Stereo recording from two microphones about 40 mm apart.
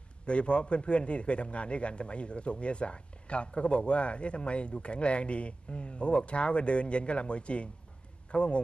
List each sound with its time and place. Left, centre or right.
0.3 s a man's voice: left